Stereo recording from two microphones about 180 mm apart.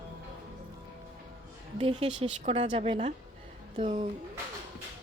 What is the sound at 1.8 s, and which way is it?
Speech, 30° right (ahead or behind).